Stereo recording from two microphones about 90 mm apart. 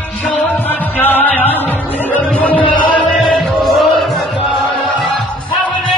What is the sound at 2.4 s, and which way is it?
Chant, 15° left (ahead or behind).